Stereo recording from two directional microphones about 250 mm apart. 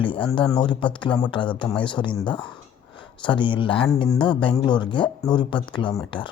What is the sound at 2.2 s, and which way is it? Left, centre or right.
Speech, centre.